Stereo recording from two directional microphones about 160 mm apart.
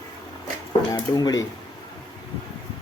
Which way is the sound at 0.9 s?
25° left (ahead or behind).